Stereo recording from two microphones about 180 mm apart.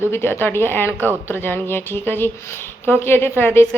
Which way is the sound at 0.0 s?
15° left (ahead or behind).